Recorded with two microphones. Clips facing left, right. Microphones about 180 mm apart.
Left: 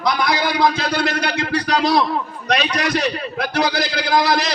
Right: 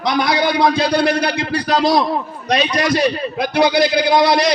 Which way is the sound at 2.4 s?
30° right (ahead or behind).